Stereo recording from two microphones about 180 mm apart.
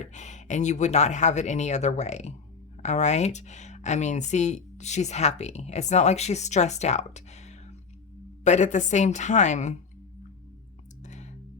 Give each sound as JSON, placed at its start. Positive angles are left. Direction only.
{"t": 0.0, "sound": "speech", "side_deg": 40}
{"t": 11.0, "sound": "clicking", "side_deg": 40}